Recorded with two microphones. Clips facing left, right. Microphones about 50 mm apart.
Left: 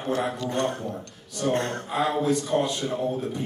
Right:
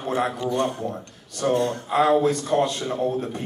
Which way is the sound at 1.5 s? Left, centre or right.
Left.